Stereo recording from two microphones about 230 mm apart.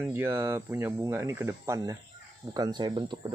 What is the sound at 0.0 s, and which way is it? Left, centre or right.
Speech, centre.